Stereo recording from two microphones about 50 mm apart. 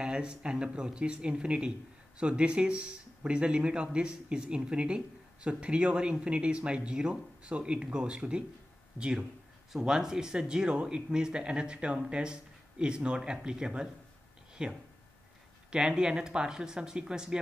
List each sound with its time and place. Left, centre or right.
0.0 s speech: centre
14.5 s a sound: centre
15.7 s speech: centre